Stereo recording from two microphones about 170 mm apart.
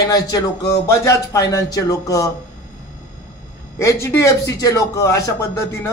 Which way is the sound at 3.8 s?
15° left (ahead or behind).